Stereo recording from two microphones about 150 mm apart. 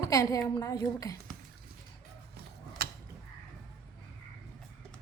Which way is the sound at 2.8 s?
90° right.